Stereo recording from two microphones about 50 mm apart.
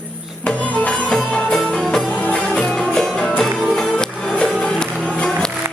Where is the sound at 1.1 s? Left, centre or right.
Centre.